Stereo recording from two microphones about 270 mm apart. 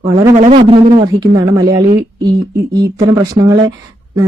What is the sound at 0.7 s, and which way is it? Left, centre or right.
Speech, centre.